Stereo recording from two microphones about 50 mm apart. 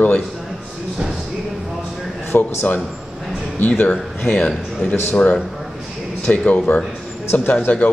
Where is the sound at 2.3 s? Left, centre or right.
Left.